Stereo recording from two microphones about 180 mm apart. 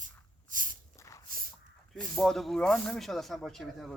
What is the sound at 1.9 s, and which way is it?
Speech, centre (ahead or behind).